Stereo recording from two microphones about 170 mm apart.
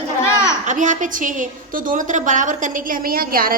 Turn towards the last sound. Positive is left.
turn(degrees=-60)  # may be behind; listen again after turning